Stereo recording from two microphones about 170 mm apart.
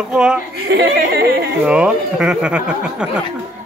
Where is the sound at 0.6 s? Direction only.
70° right (ahead or behind).